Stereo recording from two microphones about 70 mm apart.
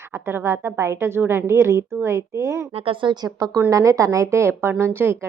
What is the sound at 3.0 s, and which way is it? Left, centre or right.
Speech, right.